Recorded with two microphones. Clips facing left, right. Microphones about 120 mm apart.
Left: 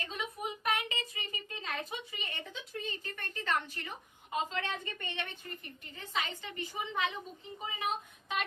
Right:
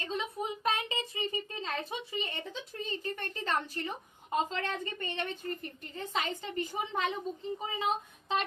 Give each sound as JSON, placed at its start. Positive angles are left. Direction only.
{"t": 0.0, "sound": "a woman's voice", "side_deg": -25}
{"t": 7.6, "sound": "child singing", "side_deg": -30}